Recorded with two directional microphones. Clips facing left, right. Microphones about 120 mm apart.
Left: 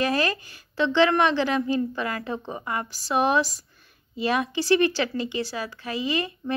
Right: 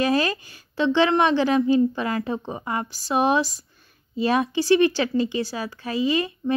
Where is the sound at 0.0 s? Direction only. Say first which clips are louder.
Right 3 dB; 30° right (ahead or behind).